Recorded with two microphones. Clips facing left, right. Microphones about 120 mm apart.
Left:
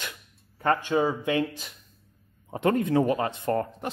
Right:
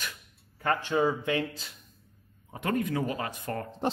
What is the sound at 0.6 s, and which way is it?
A man's voice, 15° left (ahead or behind).